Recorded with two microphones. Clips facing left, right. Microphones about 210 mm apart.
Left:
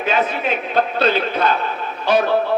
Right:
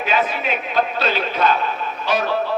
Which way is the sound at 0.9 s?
60° left (ahead or behind).